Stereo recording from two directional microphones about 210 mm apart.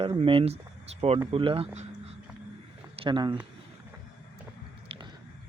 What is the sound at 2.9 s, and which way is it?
Speech, 25° right (ahead or behind).